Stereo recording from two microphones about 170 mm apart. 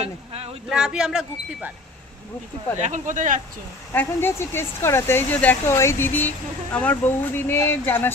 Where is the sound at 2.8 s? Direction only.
45° right (ahead or behind).